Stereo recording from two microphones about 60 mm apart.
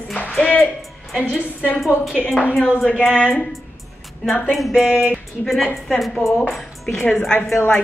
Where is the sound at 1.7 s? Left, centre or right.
Centre.